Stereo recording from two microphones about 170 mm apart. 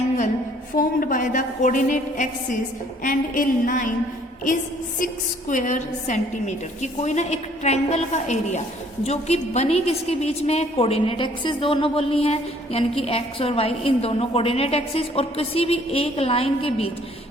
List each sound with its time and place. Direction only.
0.8 s a woman's voice: 55° left (ahead or behind)
5.5 s a woman's voice: 50° left (ahead or behind)